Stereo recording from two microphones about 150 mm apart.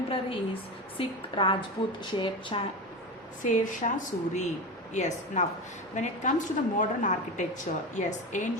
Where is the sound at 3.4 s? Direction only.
60° left (ahead or behind).